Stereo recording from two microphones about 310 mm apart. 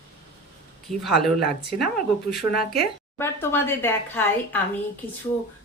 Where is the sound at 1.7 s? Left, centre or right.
Centre.